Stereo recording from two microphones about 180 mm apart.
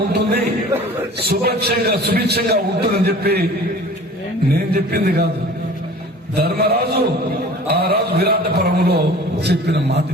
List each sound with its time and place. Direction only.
0.1 s a sound: 65° right (ahead or behind)
1.2 s a man's voice: 60° right (ahead or behind)
4.7 s a man's voice: 60° right (ahead or behind)
6.3 s a man's voice: 60° right (ahead or behind)